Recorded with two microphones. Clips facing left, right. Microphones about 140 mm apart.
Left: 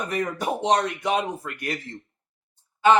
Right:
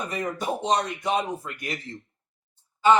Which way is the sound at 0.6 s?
55° left (ahead or behind).